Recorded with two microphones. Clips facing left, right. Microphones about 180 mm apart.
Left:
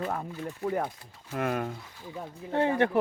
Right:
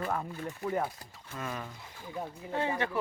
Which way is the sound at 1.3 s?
60° left (ahead or behind).